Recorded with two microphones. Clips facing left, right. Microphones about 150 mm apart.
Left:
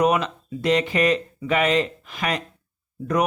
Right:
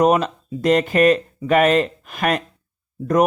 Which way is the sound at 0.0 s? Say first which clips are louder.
Right 4 dB; 45° right (ahead or behind).